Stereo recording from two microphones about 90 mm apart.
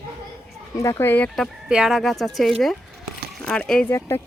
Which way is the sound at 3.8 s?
25° left (ahead or behind).